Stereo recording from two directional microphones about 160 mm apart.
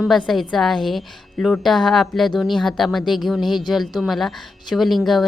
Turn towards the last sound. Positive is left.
turn(degrees=0)  # may be behind; listen again after turning